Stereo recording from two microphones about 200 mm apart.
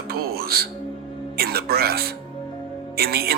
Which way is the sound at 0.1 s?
50° right (ahead or behind).